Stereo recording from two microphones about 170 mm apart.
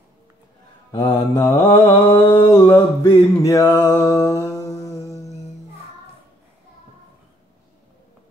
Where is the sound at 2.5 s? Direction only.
25° left (ahead or behind).